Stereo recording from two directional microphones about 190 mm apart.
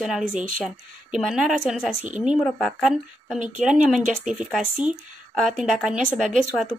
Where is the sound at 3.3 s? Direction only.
40° right (ahead or behind).